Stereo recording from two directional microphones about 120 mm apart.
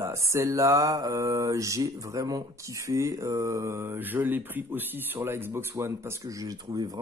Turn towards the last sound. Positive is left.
turn(degrees=-35)  # may be behind; listen again after turning